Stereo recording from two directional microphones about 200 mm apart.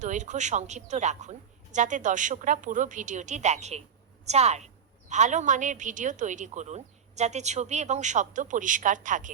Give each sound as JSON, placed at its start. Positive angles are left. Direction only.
{"t": 0.0, "sound": "a woman's voice", "side_deg": -35}